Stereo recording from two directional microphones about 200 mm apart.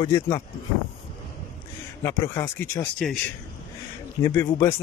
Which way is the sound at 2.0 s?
15° left (ahead or behind).